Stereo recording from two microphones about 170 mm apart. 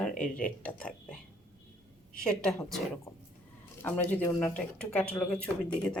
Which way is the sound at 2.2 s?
5° left (ahead or behind).